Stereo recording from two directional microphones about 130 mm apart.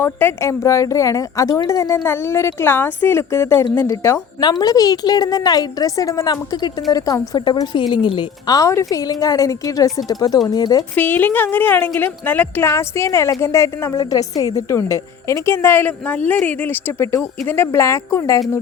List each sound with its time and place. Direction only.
0.0 s speech: 15° left (ahead or behind)
4.4 s speech: 30° left (ahead or behind)
10.9 s a woman's voice: 15° left (ahead or behind)